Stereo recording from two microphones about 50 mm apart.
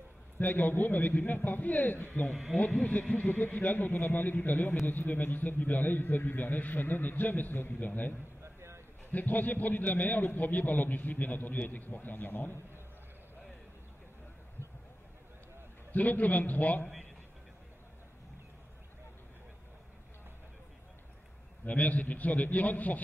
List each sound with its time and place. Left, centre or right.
0.4 s a man's voice: left
2.5 s speech: centre
2.8 s a man's voice: left
8.5 s a sound: right
9.1 s a man's voice: left
15.9 s a man's voice: left
21.6 s a man's voice: left